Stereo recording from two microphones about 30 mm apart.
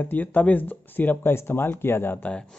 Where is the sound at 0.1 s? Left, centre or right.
Left.